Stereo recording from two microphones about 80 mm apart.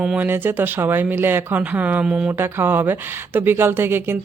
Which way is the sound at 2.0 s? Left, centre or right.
Centre.